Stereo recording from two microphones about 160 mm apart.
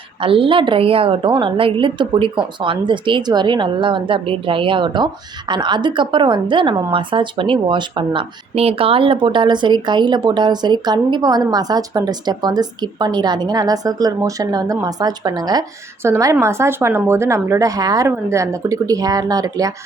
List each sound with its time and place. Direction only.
0.2 s a woman's voice: 35° right (ahead or behind)